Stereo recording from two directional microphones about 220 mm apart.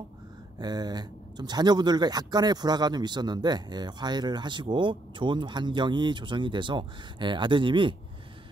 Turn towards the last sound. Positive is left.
turn(degrees=-20)  # may be behind; listen again after turning